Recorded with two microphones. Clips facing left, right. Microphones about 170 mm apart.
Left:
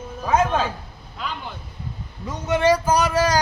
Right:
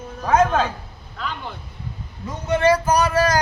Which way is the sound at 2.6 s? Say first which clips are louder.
Right 1 dB; 15° left (ahead or behind).